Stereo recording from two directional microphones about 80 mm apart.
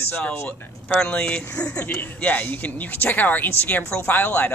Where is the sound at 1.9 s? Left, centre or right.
Left.